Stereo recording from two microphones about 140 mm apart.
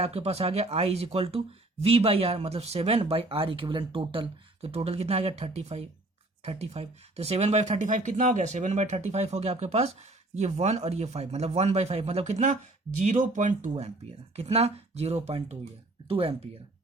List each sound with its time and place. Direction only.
0.0 s speech: 50° right (ahead or behind)